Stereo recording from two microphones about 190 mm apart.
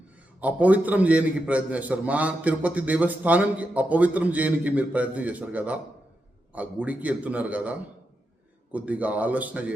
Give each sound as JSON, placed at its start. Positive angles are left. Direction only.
{"t": 0.3, "sound": "a man's voice", "side_deg": -10}